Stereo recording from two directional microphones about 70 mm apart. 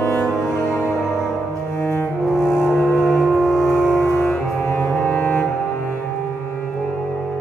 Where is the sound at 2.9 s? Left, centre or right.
Centre.